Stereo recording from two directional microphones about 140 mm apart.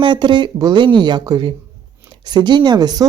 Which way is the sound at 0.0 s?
35° right (ahead or behind).